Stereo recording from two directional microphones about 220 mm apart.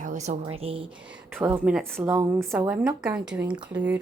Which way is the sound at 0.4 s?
25° right (ahead or behind).